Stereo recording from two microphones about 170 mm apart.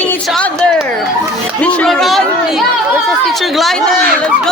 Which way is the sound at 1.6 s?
5° left (ahead or behind).